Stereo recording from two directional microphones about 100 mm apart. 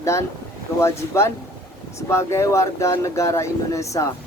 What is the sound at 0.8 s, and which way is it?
Speech, 25° left (ahead or behind).